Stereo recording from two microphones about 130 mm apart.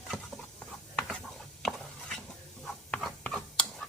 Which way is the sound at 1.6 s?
5° left (ahead or behind).